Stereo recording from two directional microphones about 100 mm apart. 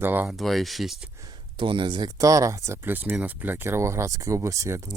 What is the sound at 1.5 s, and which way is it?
Speech, 55° right (ahead or behind).